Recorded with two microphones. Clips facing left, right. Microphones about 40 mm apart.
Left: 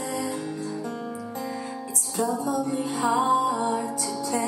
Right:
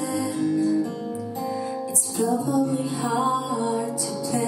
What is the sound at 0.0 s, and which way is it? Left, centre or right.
Music, left.